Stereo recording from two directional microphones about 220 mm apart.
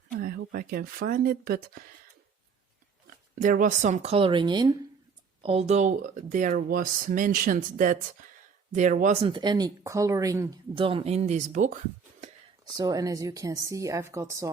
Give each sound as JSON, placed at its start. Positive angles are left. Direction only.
{"t": 0.2, "sound": "speech", "side_deg": -40}
{"t": 3.3, "sound": "speech", "side_deg": -40}
{"t": 9.2, "sound": "speech", "side_deg": -20}
{"t": 12.6, "sound": "speech", "side_deg": -15}